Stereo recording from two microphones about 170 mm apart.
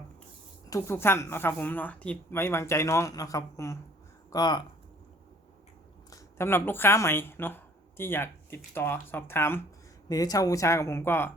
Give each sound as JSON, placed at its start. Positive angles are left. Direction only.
{"t": 0.7, "sound": "speech", "side_deg": 15}
{"t": 6.1, "sound": "speech", "side_deg": 15}